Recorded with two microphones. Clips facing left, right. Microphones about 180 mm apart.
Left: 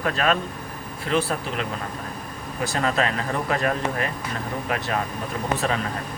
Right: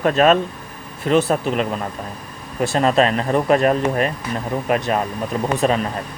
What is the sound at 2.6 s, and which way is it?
Speech, 25° right (ahead or behind).